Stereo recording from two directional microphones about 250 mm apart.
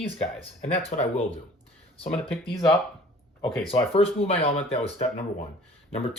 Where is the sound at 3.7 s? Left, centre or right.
Left.